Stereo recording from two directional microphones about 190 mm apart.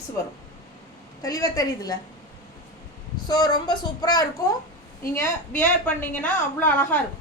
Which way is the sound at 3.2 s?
20° left (ahead or behind).